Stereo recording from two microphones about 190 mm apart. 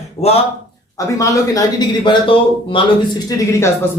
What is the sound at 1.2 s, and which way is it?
A man's voice, 20° left (ahead or behind).